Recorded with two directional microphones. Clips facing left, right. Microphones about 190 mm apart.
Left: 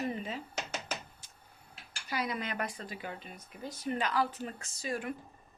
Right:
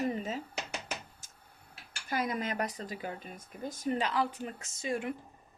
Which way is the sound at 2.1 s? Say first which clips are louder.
Right 2 dB; 45° right (ahead or behind).